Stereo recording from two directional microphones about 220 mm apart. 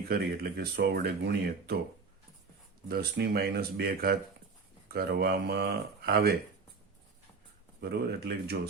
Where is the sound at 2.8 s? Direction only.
45° right (ahead or behind).